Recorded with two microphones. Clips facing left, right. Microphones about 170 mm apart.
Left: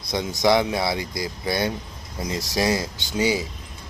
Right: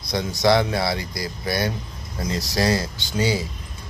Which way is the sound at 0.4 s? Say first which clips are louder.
Right 1 dB; 15° left (ahead or behind).